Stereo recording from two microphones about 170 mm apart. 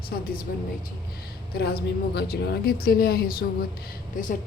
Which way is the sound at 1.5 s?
65° left (ahead or behind).